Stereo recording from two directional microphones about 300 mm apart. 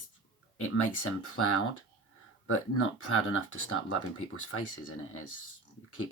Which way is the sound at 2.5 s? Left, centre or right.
Left.